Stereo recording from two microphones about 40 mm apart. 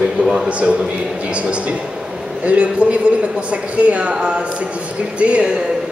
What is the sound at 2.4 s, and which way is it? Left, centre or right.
A man's voice, right.